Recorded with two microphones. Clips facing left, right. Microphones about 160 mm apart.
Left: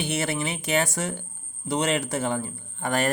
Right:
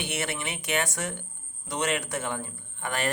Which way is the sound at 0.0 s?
35° left (ahead or behind).